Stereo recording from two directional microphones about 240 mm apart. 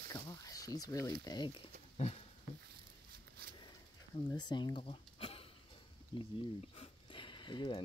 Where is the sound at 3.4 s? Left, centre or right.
Right.